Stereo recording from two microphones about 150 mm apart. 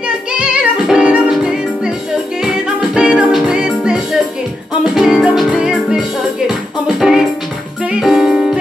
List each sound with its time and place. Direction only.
0.3 s music: 5° right (ahead or behind)